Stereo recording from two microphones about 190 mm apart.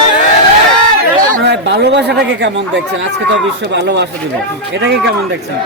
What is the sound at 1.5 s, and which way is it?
Speech, 65° right (ahead or behind).